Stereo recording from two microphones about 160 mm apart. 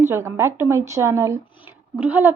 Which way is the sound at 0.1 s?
15° right (ahead or behind).